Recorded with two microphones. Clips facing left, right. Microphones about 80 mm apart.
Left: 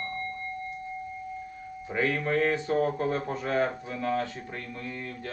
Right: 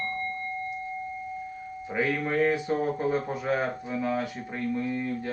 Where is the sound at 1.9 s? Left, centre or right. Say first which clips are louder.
Even; centre.